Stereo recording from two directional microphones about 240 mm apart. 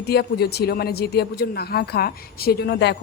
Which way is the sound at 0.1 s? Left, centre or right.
Left.